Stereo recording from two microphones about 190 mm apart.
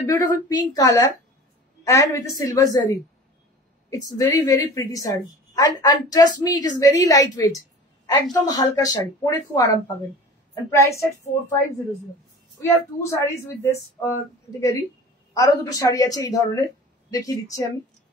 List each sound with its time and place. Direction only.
0.1 s a woman's voice: 15° left (ahead or behind)
4.1 s a woman's voice: 20° left (ahead or behind)
12.5 s a woman's voice: 15° left (ahead or behind)